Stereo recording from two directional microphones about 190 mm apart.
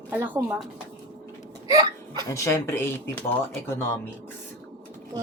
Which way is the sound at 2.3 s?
15° left (ahead or behind).